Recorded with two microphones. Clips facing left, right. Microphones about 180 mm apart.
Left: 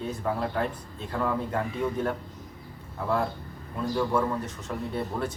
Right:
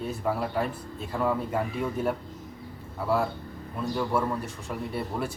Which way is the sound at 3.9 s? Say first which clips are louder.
Left 1 dB; 10° right (ahead or behind).